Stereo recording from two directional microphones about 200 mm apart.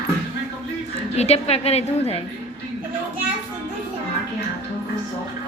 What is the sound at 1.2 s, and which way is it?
A woman's voice, 30° left (ahead or behind).